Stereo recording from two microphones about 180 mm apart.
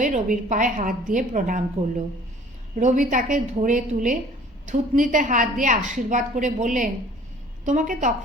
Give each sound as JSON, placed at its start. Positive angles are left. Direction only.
{"t": 0.0, "sound": "a woman's voice", "side_deg": -45}
{"t": 2.7, "sound": "a woman's voice", "side_deg": -45}